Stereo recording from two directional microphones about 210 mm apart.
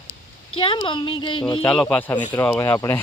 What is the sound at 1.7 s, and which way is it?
Speech, 5° left (ahead or behind).